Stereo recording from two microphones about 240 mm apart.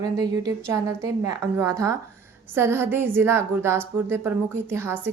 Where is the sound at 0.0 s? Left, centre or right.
Centre.